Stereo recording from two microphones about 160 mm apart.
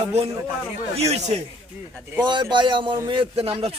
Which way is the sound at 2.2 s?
30° right (ahead or behind).